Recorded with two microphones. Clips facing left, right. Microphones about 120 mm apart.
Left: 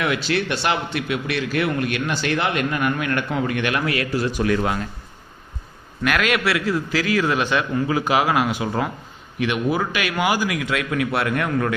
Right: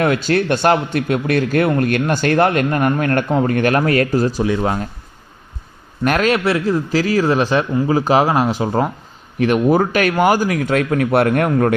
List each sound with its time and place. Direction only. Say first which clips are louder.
0.0 s speech: right 6 dB; 45° right (ahead or behind)
4.4 s speech: right 2 dB; 25° right (ahead or behind)
6.1 s a man's voice: right 5 dB; 40° right (ahead or behind)